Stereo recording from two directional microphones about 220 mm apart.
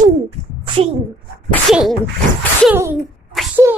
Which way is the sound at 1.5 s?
Centre (ahead or behind).